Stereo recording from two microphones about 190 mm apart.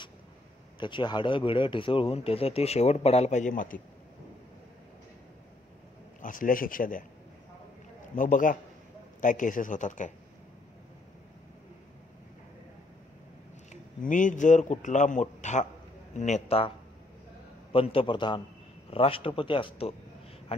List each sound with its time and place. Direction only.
0.7 s speech: 25° left (ahead or behind); by 3.8 s 45° left (ahead or behind)
6.2 s speech: 45° left (ahead or behind)
8.2 s speech: 45° left (ahead or behind)
13.7 s speech: 40° left (ahead or behind)
17.7 s speech: 30° left (ahead or behind)